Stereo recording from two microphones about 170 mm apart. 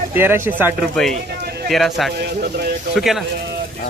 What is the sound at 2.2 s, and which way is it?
Speech, 70° right (ahead or behind).